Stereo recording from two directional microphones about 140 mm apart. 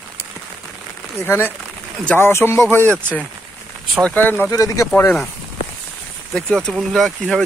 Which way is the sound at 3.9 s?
5° left (ahead or behind).